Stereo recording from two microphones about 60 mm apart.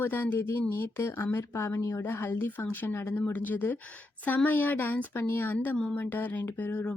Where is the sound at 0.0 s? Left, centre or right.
Left.